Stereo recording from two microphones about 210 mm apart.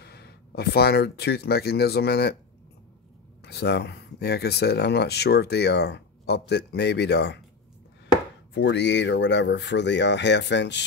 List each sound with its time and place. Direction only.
0.0 s speech: 50° left (ahead or behind)
3.4 s speech: 50° left (ahead or behind)
8.5 s speech: 55° left (ahead or behind)